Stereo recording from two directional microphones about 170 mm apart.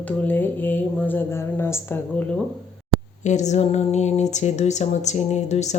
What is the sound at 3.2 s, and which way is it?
Speech, 45° left (ahead or behind).